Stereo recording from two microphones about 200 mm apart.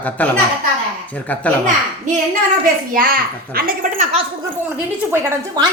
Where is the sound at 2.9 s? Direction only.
45° right (ahead or behind).